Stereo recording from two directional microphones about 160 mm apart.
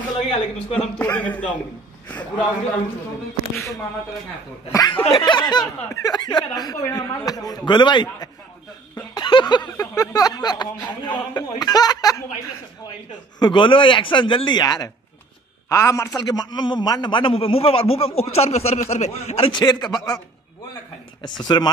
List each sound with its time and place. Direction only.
0.3 s a man's voice: 35° left (ahead or behind)
0.9 s a man's voice: 10° left (ahead or behind)
4.7 s speech: 25° left (ahead or behind)
13.4 s a man's voice: 30° left (ahead or behind)
21.2 s speech: 25° left (ahead or behind)